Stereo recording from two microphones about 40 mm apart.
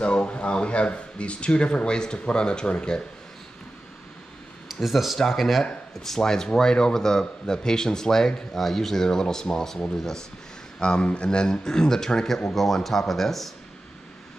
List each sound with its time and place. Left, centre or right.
0.0 s speech: left
4.6 s speech: centre
5.6 s speech: centre
10.8 s speech: left; by 13.5 s centre